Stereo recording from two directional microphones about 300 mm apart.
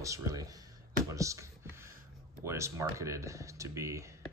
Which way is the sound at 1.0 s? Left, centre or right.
Centre.